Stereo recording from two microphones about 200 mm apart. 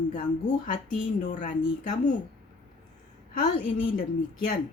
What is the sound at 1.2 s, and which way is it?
Speech, 40° left (ahead or behind).